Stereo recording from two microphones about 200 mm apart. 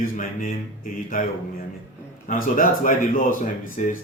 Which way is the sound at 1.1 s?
45° left (ahead or behind).